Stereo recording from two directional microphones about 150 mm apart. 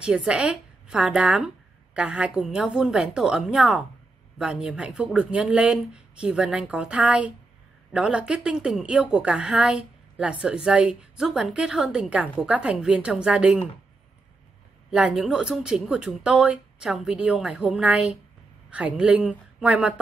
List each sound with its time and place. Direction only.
0.0 s a woman's voice: 5° right (ahead or behind)
14.9 s a woman's voice: 5° right (ahead or behind)